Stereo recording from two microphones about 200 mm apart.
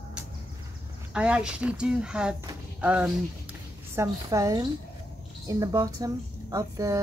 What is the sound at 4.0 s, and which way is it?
A woman's voice, 15° right (ahead or behind).